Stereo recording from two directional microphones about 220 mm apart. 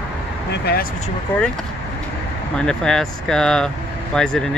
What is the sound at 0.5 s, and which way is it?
Speech, 45° left (ahead or behind).